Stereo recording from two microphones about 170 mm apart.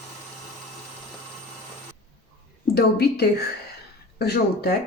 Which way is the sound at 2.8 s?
70° left (ahead or behind).